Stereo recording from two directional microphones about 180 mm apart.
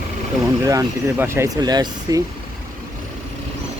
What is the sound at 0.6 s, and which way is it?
Speech, 15° right (ahead or behind).